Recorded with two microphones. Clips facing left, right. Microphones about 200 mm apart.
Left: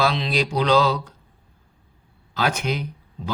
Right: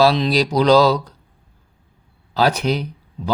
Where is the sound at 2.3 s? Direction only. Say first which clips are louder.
Right 6 dB; 35° right (ahead or behind).